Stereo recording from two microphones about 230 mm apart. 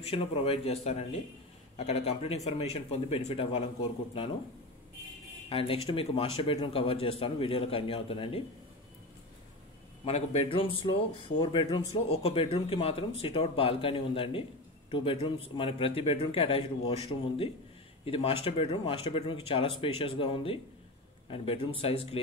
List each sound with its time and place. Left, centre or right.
0.0 s speech: left
5.5 s speech: left
10.0 s speech: left